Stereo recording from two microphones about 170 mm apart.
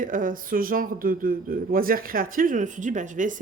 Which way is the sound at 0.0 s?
55° right (ahead or behind).